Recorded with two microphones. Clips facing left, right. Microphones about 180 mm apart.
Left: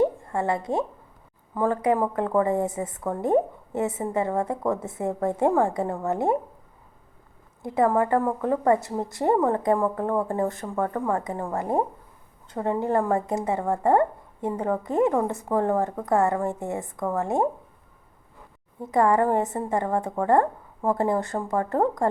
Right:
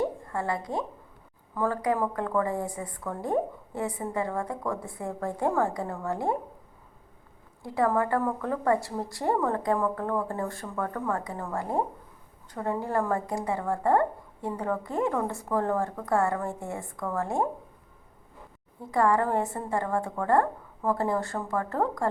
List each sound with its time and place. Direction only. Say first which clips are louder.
0.0 s a sound: left 6 dB; 25° left (ahead or behind)
1.5 s a woman's voice: left 4 dB; 20° left (ahead or behind)
7.6 s a woman's voice: left 4 dB; 20° left (ahead or behind)
18.8 s a woman's voice: left 4 dB; 20° left (ahead or behind)